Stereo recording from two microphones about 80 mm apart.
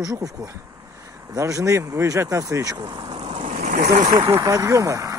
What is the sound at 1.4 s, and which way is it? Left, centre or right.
Speech, right.